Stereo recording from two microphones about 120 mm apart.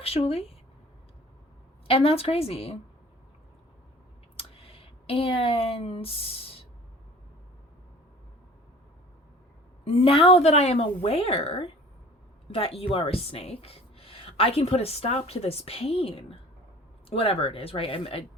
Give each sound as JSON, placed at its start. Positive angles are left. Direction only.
{"t": 0.0, "sound": "speech", "side_deg": 55}
{"t": 1.9, "sound": "a woman's voice", "side_deg": 55}
{"t": 4.4, "sound": "a sound", "side_deg": 50}
{"t": 9.8, "sound": "a woman's voice", "side_deg": 55}